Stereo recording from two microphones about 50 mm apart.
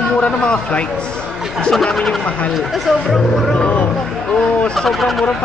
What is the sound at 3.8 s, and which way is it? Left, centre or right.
Music, centre.